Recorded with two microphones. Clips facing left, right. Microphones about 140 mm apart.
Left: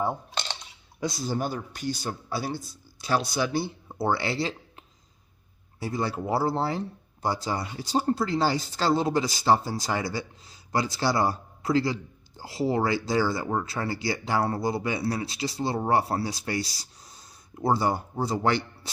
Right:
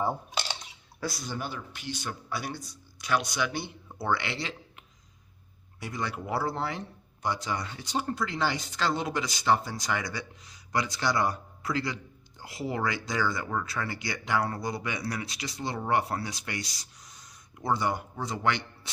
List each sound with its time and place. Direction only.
0.3 s dishes: 10° right (ahead or behind)
0.9 s speech: 25° left (ahead or behind)
1.3 s speech: 40° left (ahead or behind)
5.8 s speech: 30° left (ahead or behind)